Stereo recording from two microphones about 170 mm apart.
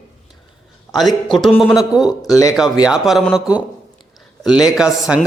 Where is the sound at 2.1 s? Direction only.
20° left (ahead or behind).